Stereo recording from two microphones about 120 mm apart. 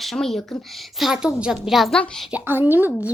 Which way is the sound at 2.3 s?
15° right (ahead or behind).